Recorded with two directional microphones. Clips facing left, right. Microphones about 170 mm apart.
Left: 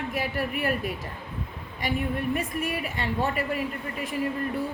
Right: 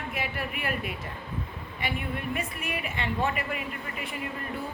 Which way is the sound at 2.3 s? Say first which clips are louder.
Left 5 dB; 40° left (ahead or behind).